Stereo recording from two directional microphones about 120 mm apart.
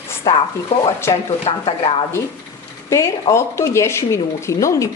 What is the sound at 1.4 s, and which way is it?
Speech, 50° left (ahead or behind).